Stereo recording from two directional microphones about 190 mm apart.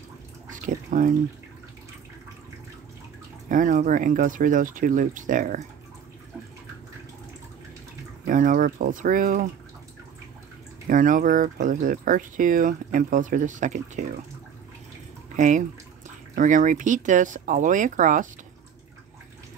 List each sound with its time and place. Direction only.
0.5 s bathtub: 45° right (ahead or behind)
3.4 s speech: 45° right (ahead or behind)
8.3 s speech: 45° right (ahead or behind)
10.9 s speech: 45° right (ahead or behind)
15.3 s speech: 40° right (ahead or behind)